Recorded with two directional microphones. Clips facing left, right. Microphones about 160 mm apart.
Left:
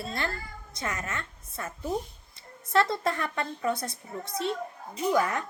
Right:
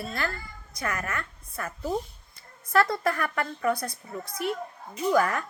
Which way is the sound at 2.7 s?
25° left (ahead or behind).